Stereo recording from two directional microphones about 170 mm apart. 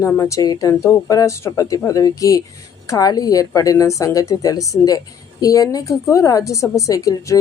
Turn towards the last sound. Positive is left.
turn(degrees=20)  # may be behind; listen again after turning